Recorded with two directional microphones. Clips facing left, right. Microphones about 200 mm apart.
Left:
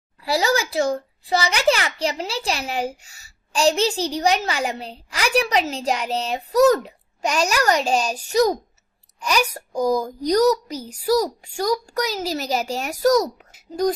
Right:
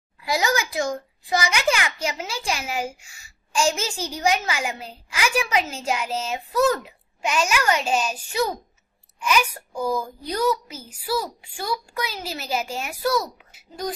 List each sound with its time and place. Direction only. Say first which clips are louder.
0.2 s a woman's voice: left 3 dB; 35° left (ahead or behind)